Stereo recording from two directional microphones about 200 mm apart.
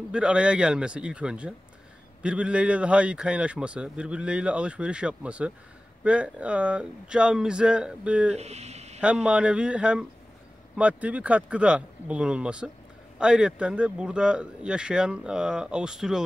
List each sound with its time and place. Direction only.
0.1 s speech: 5° right (ahead or behind)
8.4 s speech: 30° right (ahead or behind)
9.0 s speech: 5° right (ahead or behind)